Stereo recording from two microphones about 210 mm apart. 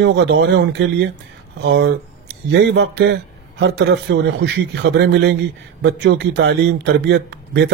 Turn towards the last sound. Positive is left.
turn(degrees=-55)  # may be behind; listen again after turning